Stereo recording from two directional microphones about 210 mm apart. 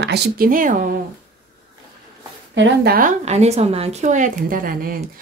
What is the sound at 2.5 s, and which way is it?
A woman's voice, 55° right (ahead or behind).